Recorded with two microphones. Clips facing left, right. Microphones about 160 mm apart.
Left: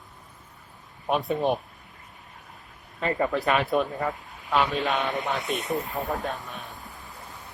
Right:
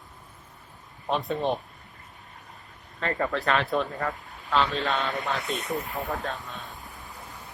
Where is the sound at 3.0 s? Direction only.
15° left (ahead or behind).